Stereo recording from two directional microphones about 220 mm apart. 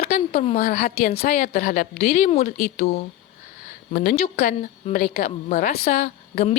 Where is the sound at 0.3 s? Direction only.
30° left (ahead or behind).